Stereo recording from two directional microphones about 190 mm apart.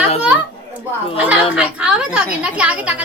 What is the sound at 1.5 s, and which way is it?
A woman's voice, 5° right (ahead or behind).